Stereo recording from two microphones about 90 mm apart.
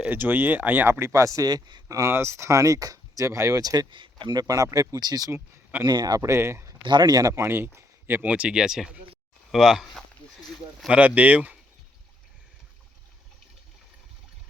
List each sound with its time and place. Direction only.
0.0 s speech: 20° right (ahead or behind)
0.9 s speech: 30° right (ahead or behind)
2.1 s speech: 30° right (ahead or behind); by 3.8 s 45° right (ahead or behind)
3.9 s speech: 65° right (ahead or behind)
6.2 s speech: 30° right (ahead or behind)
6.8 s speech: 55° right (ahead or behind); by 8.3 s 25° right (ahead or behind)
8.3 s speech: 10° right (ahead or behind)
11.0 s speech: 15° right (ahead or behind)